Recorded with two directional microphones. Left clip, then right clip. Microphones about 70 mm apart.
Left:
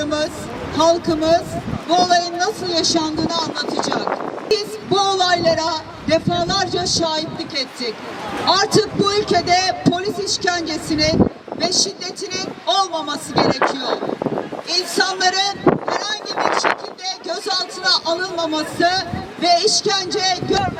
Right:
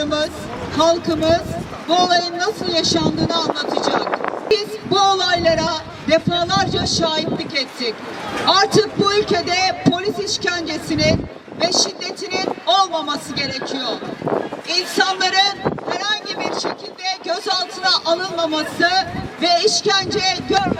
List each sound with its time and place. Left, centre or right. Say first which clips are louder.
0.0 s vehicle: right 1 dB; left
0.8 s speech: even; left